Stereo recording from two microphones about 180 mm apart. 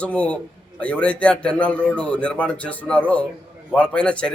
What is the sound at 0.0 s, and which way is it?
A man's voice, 5° left (ahead or behind).